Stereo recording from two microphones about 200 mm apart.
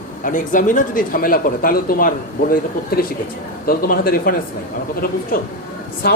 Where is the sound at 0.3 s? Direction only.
40° left (ahead or behind).